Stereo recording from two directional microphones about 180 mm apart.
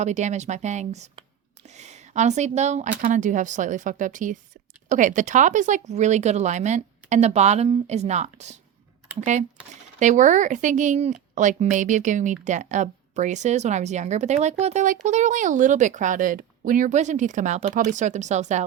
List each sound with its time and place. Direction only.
0.0 s a woman's voice: 40° right (ahead or behind)